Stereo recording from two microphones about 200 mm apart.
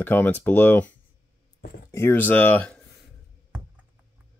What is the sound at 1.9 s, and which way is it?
Speech, 10° left (ahead or behind).